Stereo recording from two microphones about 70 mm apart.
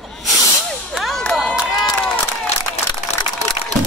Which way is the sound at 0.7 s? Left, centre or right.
Centre.